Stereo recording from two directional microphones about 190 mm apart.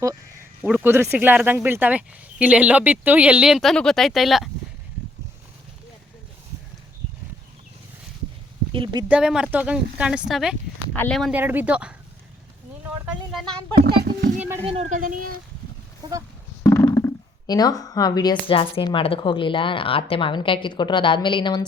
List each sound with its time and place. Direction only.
0.6 s speech: 10° right (ahead or behind)
8.7 s speech: 25° right (ahead or behind)
9.0 s speech: 5° right (ahead or behind)
11.3 s speech: 10° right (ahead or behind)
14.3 s a sound: 10° right (ahead or behind)
14.6 s speech: 30° right (ahead or behind)
16.0 s speech: 20° right (ahead or behind)
16.6 s speech: 15° left (ahead or behind)